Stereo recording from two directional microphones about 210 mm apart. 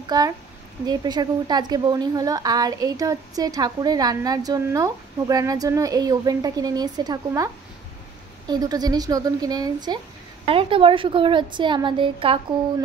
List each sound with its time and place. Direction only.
0.0 s a woman's voice: 20° right (ahead or behind)